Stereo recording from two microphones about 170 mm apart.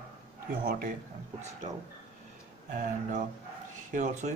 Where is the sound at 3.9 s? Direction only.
45° right (ahead or behind).